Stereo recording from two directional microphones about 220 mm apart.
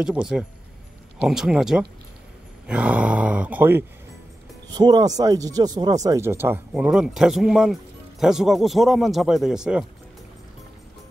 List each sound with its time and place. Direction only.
0.0 s speech: 5° right (ahead or behind)